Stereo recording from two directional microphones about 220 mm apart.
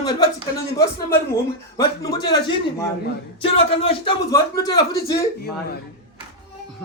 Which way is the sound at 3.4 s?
25° left (ahead or behind).